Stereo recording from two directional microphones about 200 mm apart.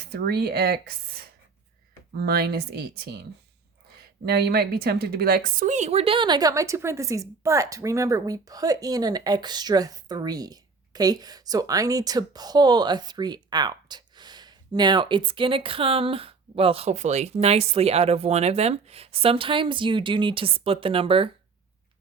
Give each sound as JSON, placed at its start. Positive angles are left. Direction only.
{"t": 0.0, "sound": "speech", "side_deg": -55}
{"t": 4.3, "sound": "a woman's voice", "side_deg": -50}